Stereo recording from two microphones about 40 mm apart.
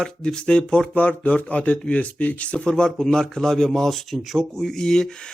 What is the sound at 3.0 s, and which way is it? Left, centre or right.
Speech, centre.